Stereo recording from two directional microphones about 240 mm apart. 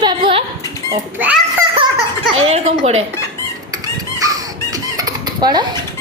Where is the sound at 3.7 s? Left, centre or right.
Centre.